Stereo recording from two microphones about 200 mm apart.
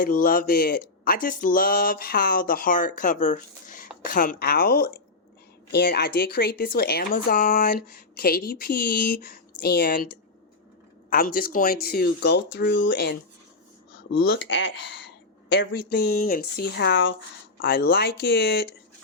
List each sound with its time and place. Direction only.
0.0 s speech: 45° left (ahead or behind)
14.4 s speech: 70° left (ahead or behind)
17.6 s speech: 50° left (ahead or behind)